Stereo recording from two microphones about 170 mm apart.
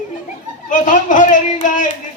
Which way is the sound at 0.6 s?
50° left (ahead or behind).